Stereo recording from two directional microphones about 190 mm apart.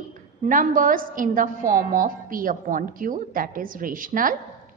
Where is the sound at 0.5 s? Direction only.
45° right (ahead or behind).